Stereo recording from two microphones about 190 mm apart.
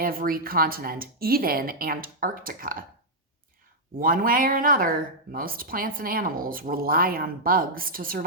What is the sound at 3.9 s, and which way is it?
Speech, 45° right (ahead or behind).